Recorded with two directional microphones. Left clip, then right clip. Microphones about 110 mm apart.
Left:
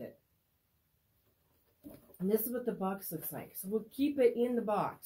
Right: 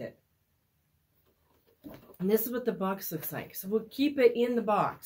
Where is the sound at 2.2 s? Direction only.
20° right (ahead or behind).